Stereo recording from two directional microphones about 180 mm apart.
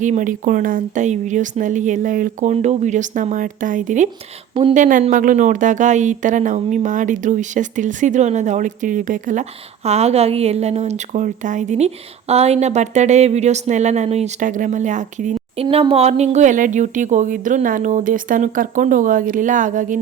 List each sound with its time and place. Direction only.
0.0 s speech: 45° right (ahead or behind)
4.5 s a woman's voice: 30° right (ahead or behind)
4.8 s a woman's voice: 45° right (ahead or behind)
15.6 s speech: 30° right (ahead or behind); by 20.0 s 45° right (ahead or behind)